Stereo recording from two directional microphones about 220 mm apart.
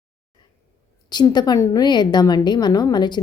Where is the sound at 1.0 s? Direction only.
20° left (ahead or behind).